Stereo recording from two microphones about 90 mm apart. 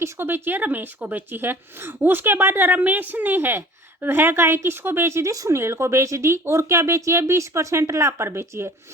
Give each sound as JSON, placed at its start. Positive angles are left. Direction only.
{"t": 0.0, "sound": "a woman's voice", "side_deg": -25}